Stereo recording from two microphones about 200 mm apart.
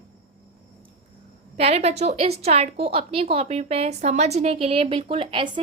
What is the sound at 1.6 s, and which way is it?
A woman's voice, 30° right (ahead or behind).